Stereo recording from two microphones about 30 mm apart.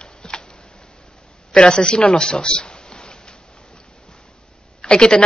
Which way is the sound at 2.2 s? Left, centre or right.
Left.